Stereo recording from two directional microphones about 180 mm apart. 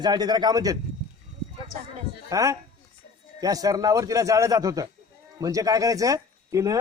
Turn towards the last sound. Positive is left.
turn(degrees=-15)  # may be behind; listen again after turning